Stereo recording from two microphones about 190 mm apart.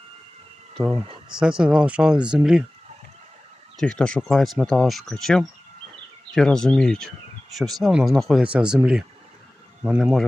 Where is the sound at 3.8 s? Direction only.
5° left (ahead or behind).